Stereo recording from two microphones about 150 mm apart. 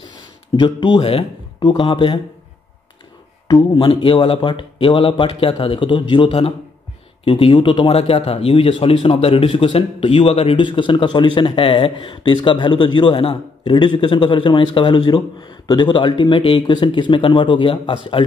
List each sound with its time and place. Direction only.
0.6 s a man's voice: 35° left (ahead or behind)
3.4 s a man's voice: 30° left (ahead or behind)